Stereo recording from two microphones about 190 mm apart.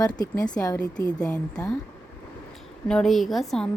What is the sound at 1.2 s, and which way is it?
Speech, 5° left (ahead or behind).